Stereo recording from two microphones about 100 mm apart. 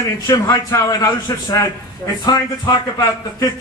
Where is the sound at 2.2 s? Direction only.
45° left (ahead or behind).